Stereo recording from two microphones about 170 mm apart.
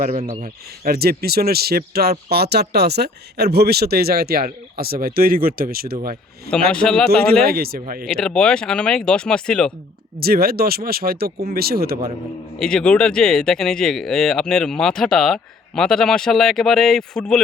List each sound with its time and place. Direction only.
0.2 s speech: 35° right (ahead or behind)
0.4 s speech: 65° right (ahead or behind)
6.5 s speech: 5° left (ahead or behind)
7.4 s speech: 65° right (ahead or behind)
8.0 s speech: 5° left (ahead or behind)
10.2 s speech: 60° right (ahead or behind)
12.5 s speech: 5° left (ahead or behind)